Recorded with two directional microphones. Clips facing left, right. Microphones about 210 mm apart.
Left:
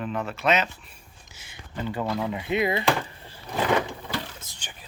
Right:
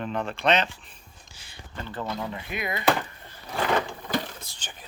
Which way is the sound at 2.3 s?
20° left (ahead or behind).